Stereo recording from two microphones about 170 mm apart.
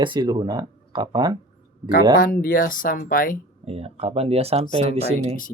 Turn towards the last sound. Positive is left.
turn(degrees=-35)  # may be behind; listen again after turning